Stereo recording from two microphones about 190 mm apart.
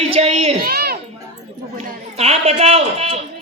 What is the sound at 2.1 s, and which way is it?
A man's voice, 35° right (ahead or behind).